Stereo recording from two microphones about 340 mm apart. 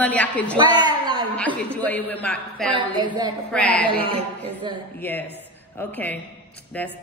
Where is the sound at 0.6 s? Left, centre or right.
Centre.